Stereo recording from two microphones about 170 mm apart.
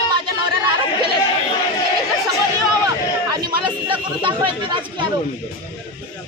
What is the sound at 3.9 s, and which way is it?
Speech, 30° right (ahead or behind).